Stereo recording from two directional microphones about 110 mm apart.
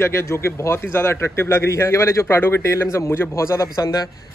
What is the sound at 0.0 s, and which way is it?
A man's voice, 25° left (ahead or behind).